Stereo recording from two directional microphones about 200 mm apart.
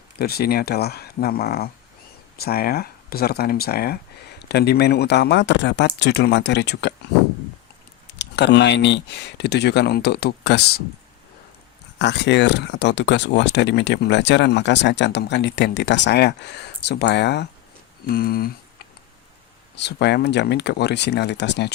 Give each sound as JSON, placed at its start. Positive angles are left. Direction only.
{"t": 0.2, "sound": "speech", "side_deg": 50}
{"t": 8.2, "sound": "speech", "side_deg": 60}
{"t": 11.9, "sound": "speech", "side_deg": 60}
{"t": 19.7, "sound": "speech", "side_deg": 60}